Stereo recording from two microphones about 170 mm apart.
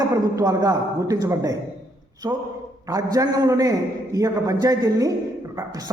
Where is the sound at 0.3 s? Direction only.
20° right (ahead or behind).